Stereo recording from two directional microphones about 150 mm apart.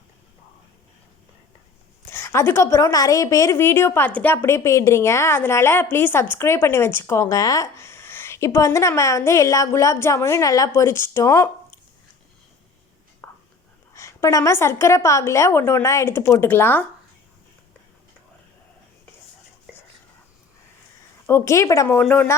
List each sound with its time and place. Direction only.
2.0 s a woman's voice: 15° left (ahead or behind)
13.2 s whispering: 15° left (ahead or behind)
13.9 s a woman's voice: 20° left (ahead or behind)
21.2 s a woman's voice: 20° left (ahead or behind)